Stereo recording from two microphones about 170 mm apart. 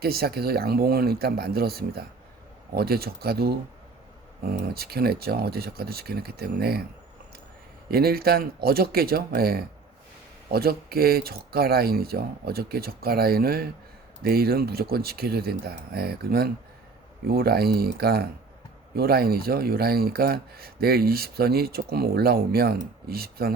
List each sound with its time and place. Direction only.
0.0 s speech: 65° right (ahead or behind)
7.9 s speech: 65° right (ahead or behind)